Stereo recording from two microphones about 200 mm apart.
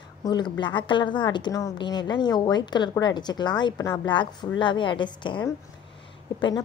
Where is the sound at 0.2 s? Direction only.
20° left (ahead or behind).